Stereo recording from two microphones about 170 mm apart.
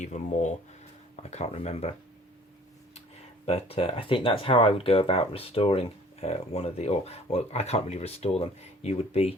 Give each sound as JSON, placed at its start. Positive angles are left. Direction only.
{"t": 0.0, "sound": "speech", "side_deg": 45}
{"t": 3.4, "sound": "speech", "side_deg": 35}